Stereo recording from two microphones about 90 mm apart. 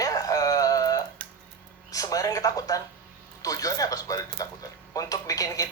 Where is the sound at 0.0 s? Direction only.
40° left (ahead or behind).